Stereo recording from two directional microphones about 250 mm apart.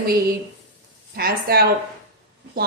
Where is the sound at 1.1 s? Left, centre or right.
Right.